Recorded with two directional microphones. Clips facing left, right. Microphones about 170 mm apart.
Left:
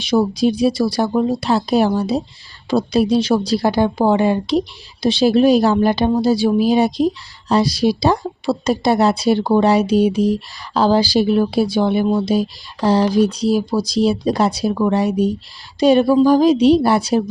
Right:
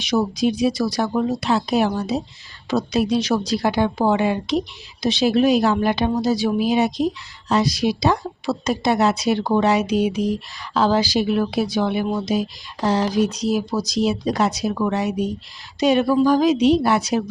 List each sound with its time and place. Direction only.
0.0 s speech: 30° left (ahead or behind)